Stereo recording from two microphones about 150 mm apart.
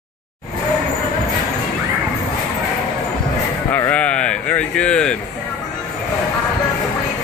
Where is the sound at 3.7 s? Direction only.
10° left (ahead or behind).